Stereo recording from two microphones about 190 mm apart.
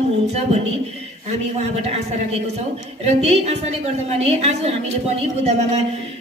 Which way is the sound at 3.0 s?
35° right (ahead or behind).